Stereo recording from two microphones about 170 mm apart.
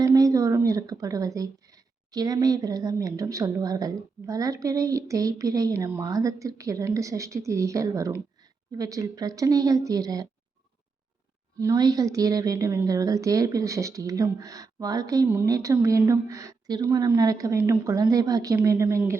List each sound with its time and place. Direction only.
0.0 s a woman's voice: 20° right (ahead or behind)
11.6 s a woman's voice: 20° right (ahead or behind)